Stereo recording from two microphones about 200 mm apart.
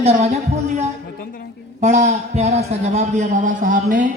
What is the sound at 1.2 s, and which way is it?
Speech, 45° left (ahead or behind).